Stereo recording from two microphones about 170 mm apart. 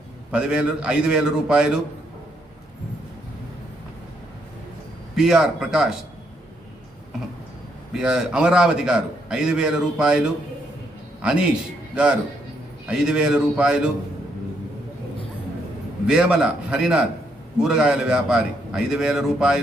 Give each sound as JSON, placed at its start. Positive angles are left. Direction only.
{"t": 0.3, "sound": "a man's voice", "side_deg": -5}
{"t": 5.1, "sound": "a man's voice", "side_deg": -5}
{"t": 7.9, "sound": "a man's voice", "side_deg": -5}
{"t": 12.9, "sound": "a man's voice", "side_deg": -5}
{"t": 16.0, "sound": "a man's voice", "side_deg": -5}